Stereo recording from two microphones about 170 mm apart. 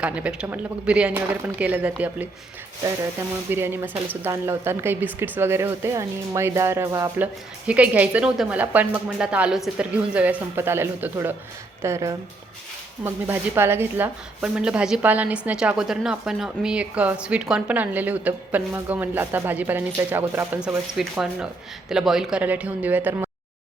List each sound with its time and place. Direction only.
0.0 s speech: 5° right (ahead or behind)
3.5 s speech: 15° right (ahead or behind)
7.7 s speech: 10° right (ahead or behind)
21.0 s speech: 5° right (ahead or behind)